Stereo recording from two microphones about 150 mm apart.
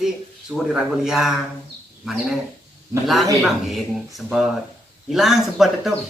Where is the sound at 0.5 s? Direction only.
5° right (ahead or behind).